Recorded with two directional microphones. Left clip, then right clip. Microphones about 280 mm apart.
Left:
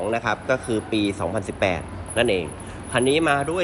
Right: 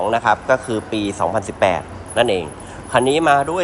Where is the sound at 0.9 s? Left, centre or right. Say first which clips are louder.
Left 2 dB; right.